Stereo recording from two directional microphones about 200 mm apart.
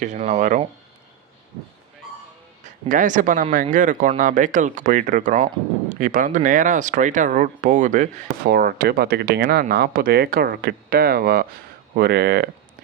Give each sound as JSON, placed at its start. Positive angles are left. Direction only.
{"t": 0.0, "sound": "speech", "side_deg": -35}
{"t": 2.8, "sound": "speech", "side_deg": -40}